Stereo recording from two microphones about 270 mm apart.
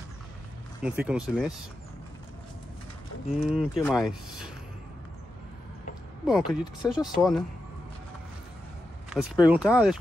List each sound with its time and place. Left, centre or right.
0.8 s speech: centre
3.3 s speech: centre
3.8 s speech: centre
6.4 s speech: centre
6.9 s speech: centre
9.1 s speech: centre